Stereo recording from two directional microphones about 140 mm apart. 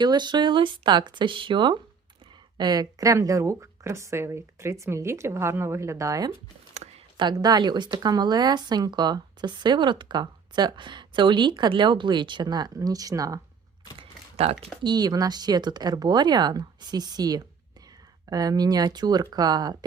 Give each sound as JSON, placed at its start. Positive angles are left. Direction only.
{"t": 0.0, "sound": "speech", "side_deg": -30}
{"t": 14.4, "sound": "speech", "side_deg": -50}
{"t": 14.8, "sound": "speech", "side_deg": -30}